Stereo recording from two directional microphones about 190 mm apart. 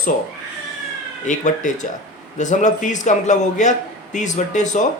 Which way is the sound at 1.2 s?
40° left (ahead or behind).